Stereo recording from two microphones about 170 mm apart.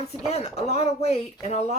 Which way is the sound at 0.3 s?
40° left (ahead or behind).